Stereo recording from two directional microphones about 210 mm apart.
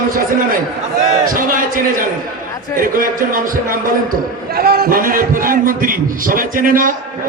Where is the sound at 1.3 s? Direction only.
40° right (ahead or behind).